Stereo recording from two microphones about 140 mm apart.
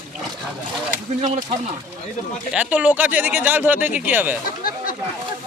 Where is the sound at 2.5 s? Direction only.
10° right (ahead or behind).